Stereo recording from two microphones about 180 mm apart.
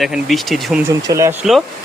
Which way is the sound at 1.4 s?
Centre (ahead or behind).